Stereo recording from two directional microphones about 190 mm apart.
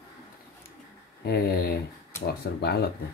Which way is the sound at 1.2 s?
55° left (ahead or behind).